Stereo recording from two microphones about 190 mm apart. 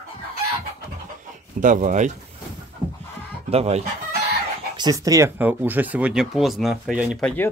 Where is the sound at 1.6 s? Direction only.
40° right (ahead or behind).